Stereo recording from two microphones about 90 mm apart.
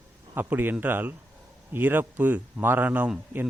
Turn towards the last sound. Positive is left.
turn(degrees=-20)  # may be behind; listen again after turning